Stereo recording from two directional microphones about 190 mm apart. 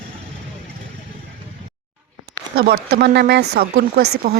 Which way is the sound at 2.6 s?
60° right (ahead or behind).